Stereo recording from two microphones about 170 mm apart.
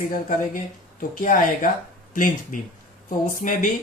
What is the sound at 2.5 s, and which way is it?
Speech, 50° left (ahead or behind).